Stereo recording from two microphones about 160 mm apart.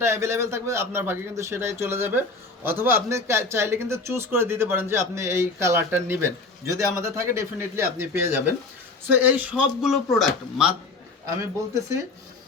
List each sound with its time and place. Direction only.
0.0 s speech: 15° right (ahead or behind)
11.3 s a man's voice: 20° right (ahead or behind)